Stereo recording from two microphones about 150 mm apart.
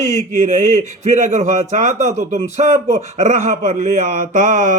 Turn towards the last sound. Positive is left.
turn(degrees=-55)  # may be behind; listen again after turning